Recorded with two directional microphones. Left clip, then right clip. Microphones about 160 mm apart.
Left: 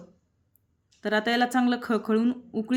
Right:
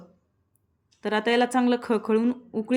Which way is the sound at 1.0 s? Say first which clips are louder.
Right 2 dB; 20° right (ahead or behind).